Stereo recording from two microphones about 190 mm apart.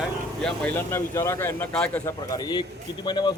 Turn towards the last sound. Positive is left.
turn(degrees=20)  # may be behind; listen again after turning